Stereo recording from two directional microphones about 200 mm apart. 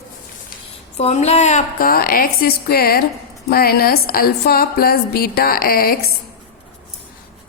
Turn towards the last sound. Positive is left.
turn(degrees=50)  # may be behind; listen again after turning